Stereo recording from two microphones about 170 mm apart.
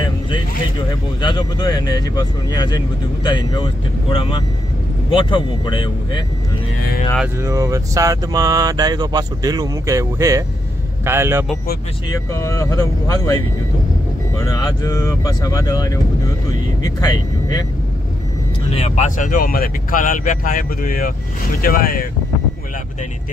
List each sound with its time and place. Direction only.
1.2 s speech: 25° left (ahead or behind)
7.3 s a sound: 20° right (ahead or behind)
11.1 s speech: 15° right (ahead or behind)
12.1 s speech: 15° left (ahead or behind)
14.4 s speech: 20° left (ahead or behind)
17.0 s speech: 20° left (ahead or behind)
18.7 s speech: 40° left (ahead or behind); by 22.0 s 55° left (ahead or behind)